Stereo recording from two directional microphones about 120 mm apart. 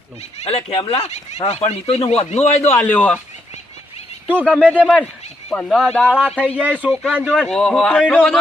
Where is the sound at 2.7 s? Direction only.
15° left (ahead or behind).